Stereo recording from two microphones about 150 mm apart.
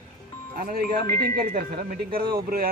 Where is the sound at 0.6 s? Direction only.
75° right (ahead or behind).